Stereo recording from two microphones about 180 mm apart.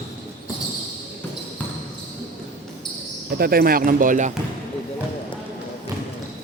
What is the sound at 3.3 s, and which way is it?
Speech, 55° right (ahead or behind).